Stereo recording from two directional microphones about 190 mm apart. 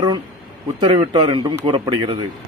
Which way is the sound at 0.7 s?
30° right (ahead or behind).